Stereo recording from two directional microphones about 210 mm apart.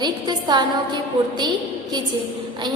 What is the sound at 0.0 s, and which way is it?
Speech, 20° right (ahead or behind).